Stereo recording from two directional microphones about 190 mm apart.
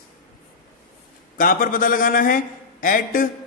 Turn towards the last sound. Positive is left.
turn(degrees=45)  # may be behind; listen again after turning